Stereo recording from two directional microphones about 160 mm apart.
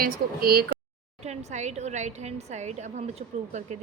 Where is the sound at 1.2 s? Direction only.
45° right (ahead or behind).